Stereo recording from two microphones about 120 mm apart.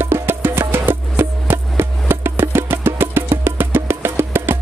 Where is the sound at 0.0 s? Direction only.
20° right (ahead or behind).